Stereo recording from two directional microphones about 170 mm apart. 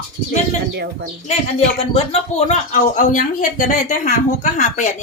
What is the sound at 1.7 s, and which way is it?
Speech, 35° left (ahead or behind).